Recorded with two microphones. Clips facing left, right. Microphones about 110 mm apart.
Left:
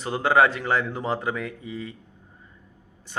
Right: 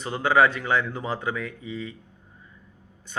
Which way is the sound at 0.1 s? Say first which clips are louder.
Left 1 dB; 40° left (ahead or behind).